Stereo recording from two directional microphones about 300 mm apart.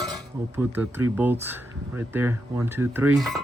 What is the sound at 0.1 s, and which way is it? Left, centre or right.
Speech, centre.